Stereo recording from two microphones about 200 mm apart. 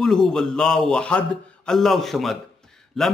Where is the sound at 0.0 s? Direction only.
5° left (ahead or behind).